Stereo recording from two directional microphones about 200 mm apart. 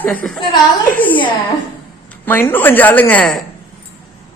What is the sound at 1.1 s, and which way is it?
Speech, 25° left (ahead or behind).